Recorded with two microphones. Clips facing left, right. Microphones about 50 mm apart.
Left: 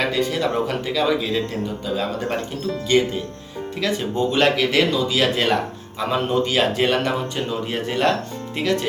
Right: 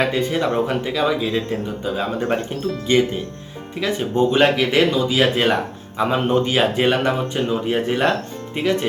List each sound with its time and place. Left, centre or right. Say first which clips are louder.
0.1 s speech: right 1 dB; right
3.8 s speech: right 3 dB; centre